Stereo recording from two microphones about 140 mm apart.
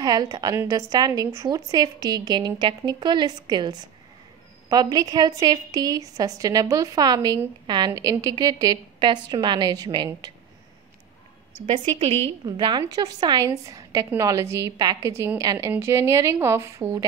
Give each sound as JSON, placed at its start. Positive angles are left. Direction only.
{"t": 0.0, "sound": "a woman's voice", "side_deg": -30}
{"t": 11.6, "sound": "a woman's voice", "side_deg": -40}
{"t": 12.4, "sound": "a woman's voice", "side_deg": -35}